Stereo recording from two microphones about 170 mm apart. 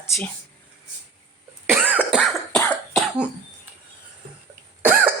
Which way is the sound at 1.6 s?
10° right (ahead or behind).